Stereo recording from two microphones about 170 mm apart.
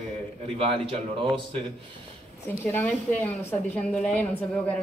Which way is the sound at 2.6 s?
15° left (ahead or behind).